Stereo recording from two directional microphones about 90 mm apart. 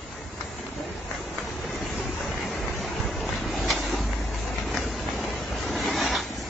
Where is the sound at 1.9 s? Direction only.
Centre (ahead or behind).